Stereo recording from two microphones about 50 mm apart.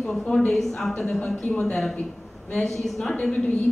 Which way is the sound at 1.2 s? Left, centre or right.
Left.